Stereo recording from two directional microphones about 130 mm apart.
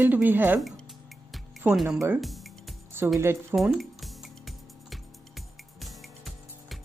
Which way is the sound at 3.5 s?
5° right (ahead or behind).